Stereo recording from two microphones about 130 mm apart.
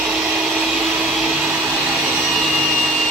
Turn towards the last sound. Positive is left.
turn(degrees=0)  # may be behind; listen again after turning